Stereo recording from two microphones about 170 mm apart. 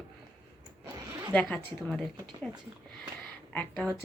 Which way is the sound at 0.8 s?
15° right (ahead or behind).